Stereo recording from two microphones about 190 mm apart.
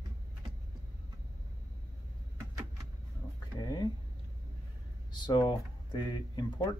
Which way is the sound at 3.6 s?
20° left (ahead or behind).